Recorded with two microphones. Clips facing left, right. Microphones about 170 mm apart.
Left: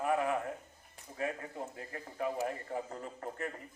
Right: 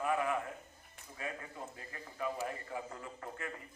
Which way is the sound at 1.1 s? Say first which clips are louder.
Left 6 dB; 45° left (ahead or behind).